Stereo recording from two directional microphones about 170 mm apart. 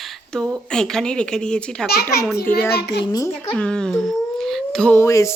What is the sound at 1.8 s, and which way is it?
A child's voice, 70° left (ahead or behind).